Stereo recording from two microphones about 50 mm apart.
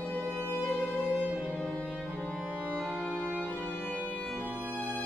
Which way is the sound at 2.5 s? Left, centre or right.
Right.